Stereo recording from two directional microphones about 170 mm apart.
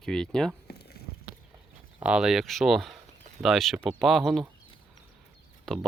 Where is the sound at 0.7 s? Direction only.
70° left (ahead or behind).